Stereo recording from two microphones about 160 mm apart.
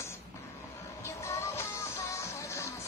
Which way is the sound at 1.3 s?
20° left (ahead or behind).